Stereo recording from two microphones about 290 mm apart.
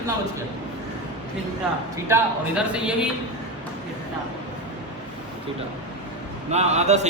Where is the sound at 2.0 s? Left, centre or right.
Centre.